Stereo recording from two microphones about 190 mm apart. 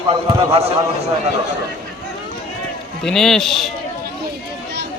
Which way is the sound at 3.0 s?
5° left (ahead or behind).